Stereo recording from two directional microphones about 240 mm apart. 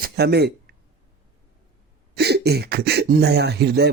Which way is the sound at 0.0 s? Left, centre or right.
Right.